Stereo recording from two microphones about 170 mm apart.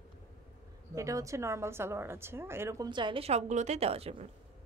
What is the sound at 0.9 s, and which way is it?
A woman's voice, 20° right (ahead or behind).